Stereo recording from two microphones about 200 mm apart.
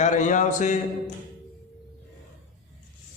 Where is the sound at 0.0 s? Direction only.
35° left (ahead or behind).